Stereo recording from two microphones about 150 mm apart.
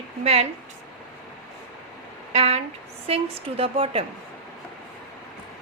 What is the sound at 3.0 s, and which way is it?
A woman's voice, 40° right (ahead or behind).